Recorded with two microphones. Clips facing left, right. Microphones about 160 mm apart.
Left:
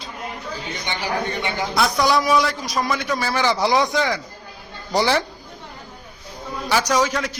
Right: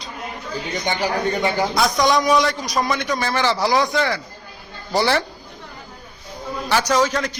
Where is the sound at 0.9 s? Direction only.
45° right (ahead or behind).